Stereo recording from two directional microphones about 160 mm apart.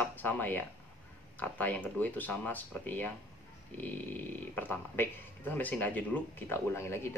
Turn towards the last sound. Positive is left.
turn(degrees=15)  # may be behind; listen again after turning